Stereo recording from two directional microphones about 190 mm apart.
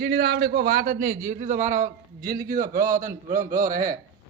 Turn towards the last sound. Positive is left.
turn(degrees=-45)  # may be behind; listen again after turning